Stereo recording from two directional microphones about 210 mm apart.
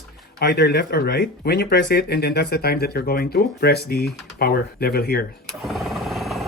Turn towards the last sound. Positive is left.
turn(degrees=0)  # may be behind; listen again after turning